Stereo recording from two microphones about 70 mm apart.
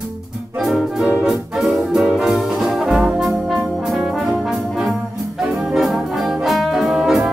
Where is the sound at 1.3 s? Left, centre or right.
Centre.